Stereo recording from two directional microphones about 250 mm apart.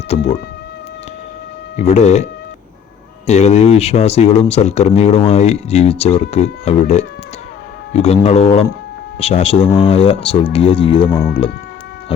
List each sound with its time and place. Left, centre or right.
1.7 s speech: left
3.2 s speech: left